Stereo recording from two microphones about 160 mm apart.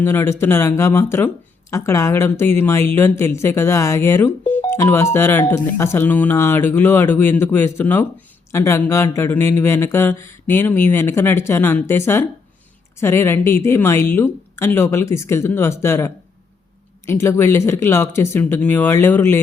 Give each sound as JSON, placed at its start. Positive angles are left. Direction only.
{"t": 0.0, "sound": "a woman's voice", "side_deg": 15}